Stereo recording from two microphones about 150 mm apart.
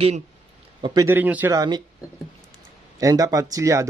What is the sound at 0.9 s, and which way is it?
Speech, 15° right (ahead or behind).